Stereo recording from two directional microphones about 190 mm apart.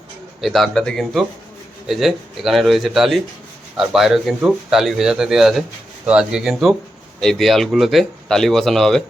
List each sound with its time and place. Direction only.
0.4 s speech: centre (ahead or behind)